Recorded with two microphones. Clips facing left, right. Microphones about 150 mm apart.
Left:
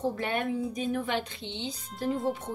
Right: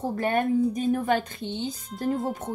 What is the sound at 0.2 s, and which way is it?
Speech, 45° right (ahead or behind).